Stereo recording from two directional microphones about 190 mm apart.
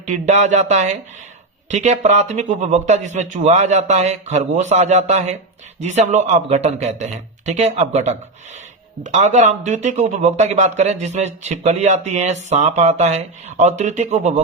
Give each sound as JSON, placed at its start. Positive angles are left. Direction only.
{"t": 0.0, "sound": "speech", "side_deg": -40}